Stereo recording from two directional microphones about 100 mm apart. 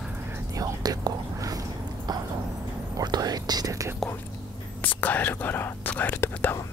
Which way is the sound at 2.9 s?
40° right (ahead or behind).